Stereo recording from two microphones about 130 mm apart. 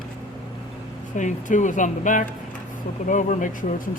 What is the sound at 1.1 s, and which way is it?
Speech, 70° left (ahead or behind).